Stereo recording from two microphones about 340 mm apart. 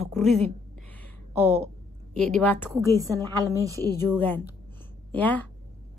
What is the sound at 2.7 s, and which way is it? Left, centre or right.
Speech, centre.